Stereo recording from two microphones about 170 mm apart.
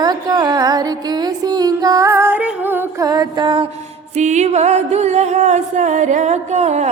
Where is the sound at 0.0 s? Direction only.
25° right (ahead or behind).